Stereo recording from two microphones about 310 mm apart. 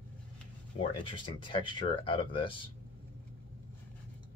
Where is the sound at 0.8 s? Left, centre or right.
Centre.